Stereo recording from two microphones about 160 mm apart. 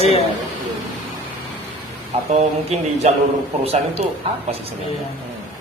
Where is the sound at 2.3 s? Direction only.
40° right (ahead or behind).